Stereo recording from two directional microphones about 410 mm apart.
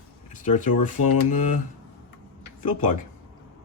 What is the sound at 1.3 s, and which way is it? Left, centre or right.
Speech, centre.